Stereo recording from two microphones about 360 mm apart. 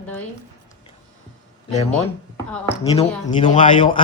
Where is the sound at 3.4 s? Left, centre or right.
Centre.